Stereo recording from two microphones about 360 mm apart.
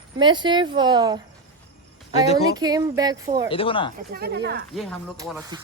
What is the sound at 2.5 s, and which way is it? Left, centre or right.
Speech, centre.